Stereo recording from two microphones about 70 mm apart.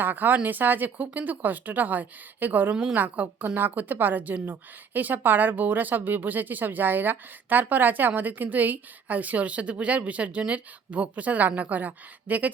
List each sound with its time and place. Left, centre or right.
0.0 s speech: right